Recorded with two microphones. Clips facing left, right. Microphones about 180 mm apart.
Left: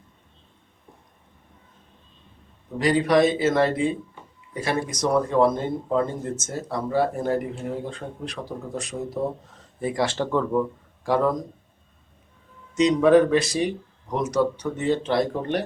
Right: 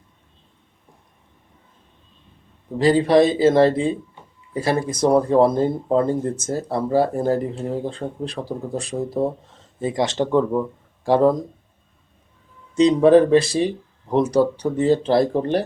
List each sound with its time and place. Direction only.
2.7 s speech: 30° right (ahead or behind)
9.8 s speech: 20° right (ahead or behind)
11.0 s speech: 30° right (ahead or behind)
12.7 s speech: 30° right (ahead or behind)